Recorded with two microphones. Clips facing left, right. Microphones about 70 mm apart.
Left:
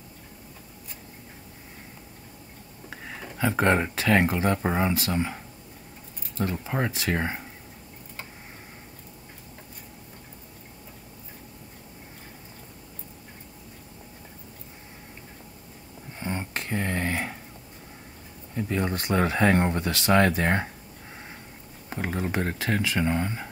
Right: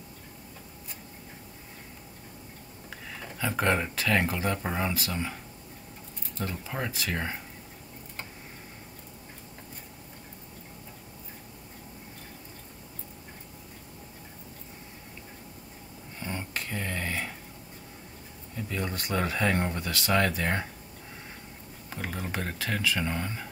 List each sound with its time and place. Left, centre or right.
2.9 s a sound: centre
3.4 s speech: left
6.4 s speech: left
16.2 s a sound: left
18.6 s speech: left
21.9 s speech: left